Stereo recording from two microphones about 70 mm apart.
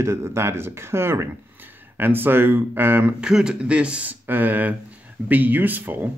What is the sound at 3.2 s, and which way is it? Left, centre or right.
Speech, centre.